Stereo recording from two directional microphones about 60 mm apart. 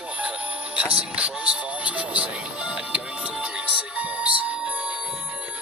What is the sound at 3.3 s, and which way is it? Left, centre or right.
Music, centre.